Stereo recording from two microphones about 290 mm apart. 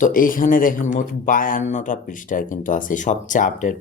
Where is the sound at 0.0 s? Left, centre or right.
Left.